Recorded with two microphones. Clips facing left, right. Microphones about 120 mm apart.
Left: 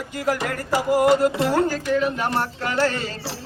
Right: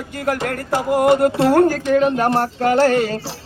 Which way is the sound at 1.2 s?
55° right (ahead or behind).